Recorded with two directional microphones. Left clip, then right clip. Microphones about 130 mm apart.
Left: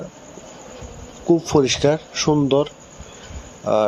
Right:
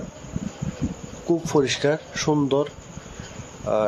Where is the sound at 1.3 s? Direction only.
15° left (ahead or behind).